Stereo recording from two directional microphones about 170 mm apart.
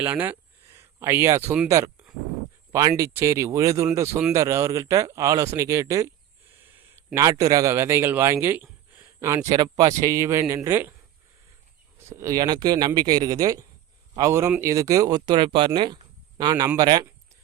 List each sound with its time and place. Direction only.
0.0 s speech: 10° right (ahead or behind)
2.7 s a man's voice: 20° right (ahead or behind)
11.9 s speech: 15° right (ahead or behind)